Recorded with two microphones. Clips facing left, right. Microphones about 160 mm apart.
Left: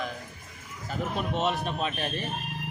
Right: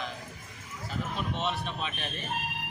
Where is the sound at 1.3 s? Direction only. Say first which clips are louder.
Left 7 dB; 45° left (ahead or behind).